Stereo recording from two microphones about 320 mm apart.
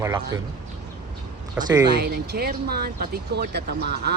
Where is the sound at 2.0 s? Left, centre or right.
Right.